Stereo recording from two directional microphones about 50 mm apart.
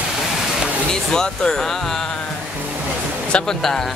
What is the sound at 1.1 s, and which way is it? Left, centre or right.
Speech, centre.